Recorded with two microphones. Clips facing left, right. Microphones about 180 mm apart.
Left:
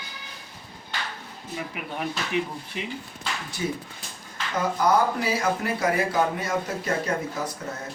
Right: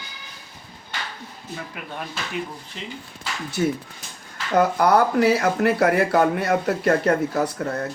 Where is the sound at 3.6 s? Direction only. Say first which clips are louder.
Right 8 dB; 60° right (ahead or behind).